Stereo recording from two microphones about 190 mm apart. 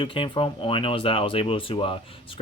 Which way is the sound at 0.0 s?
25° left (ahead or behind).